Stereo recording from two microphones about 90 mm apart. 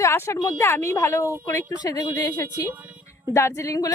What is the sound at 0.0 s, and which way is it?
A woman's voice, 30° left (ahead or behind).